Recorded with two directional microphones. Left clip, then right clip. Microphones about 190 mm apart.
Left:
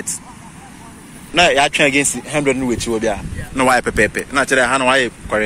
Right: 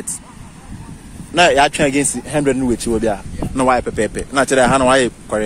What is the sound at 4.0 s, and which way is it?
Speech, 20° right (ahead or behind).